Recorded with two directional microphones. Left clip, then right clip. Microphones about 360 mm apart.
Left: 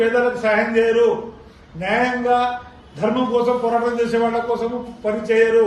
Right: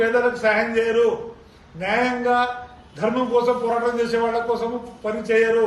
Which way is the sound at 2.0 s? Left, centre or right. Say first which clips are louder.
Left 2 dB; centre.